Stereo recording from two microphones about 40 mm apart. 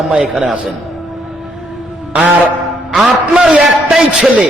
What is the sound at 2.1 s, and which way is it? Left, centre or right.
Music, right.